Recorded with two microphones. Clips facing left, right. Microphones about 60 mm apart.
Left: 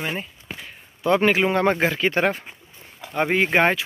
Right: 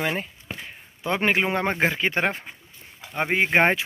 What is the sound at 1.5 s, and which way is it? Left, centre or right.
Speech, centre.